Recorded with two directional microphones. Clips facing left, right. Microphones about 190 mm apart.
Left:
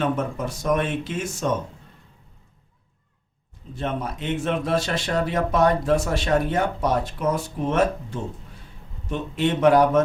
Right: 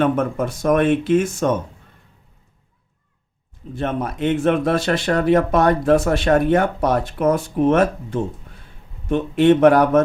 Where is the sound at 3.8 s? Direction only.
55° right (ahead or behind).